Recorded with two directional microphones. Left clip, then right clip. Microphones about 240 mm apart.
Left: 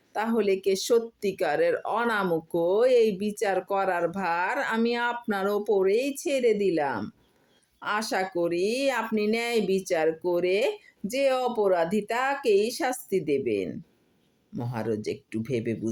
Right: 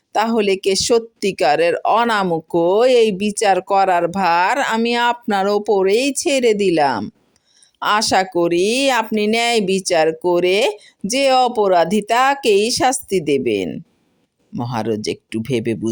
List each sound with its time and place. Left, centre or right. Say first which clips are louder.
0.1 s speech: right 9 dB; right